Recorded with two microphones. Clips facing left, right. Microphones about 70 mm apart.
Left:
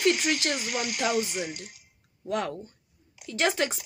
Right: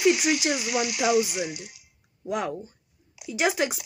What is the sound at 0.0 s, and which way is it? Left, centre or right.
Speech, centre.